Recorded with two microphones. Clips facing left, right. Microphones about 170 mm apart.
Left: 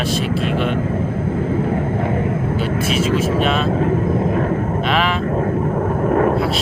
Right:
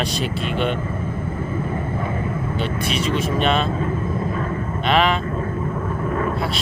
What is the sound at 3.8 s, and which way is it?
Vehicle, 65° left (ahead or behind).